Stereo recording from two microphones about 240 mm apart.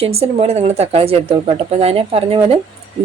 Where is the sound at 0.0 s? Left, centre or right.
Right.